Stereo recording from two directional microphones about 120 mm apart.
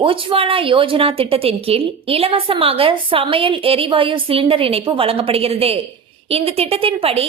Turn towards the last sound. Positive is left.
turn(degrees=-50)  # may be behind; listen again after turning